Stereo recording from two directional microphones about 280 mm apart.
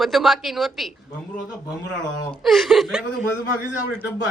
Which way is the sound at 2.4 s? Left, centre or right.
Centre.